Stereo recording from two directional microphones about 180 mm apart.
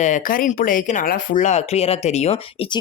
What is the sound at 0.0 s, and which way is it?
Speech, 45° left (ahead or behind).